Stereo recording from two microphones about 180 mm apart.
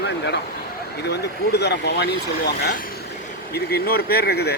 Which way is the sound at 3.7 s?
60° left (ahead or behind).